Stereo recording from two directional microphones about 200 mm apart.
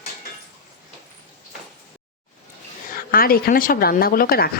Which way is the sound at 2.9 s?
45° left (ahead or behind).